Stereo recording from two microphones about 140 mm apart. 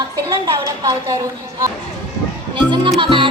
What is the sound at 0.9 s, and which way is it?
Speech, 25° right (ahead or behind).